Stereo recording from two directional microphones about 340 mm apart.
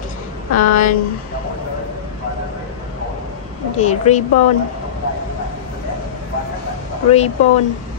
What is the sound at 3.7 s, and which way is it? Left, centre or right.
Speech, centre.